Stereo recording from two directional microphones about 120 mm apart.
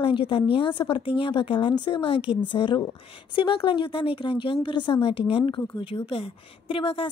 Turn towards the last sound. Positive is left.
turn(degrees=45)  # may be behind; listen again after turning